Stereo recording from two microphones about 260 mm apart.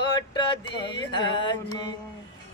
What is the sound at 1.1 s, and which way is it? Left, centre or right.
Music, centre.